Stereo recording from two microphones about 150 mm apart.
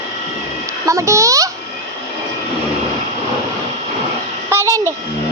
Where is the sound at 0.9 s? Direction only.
20° right (ahead or behind).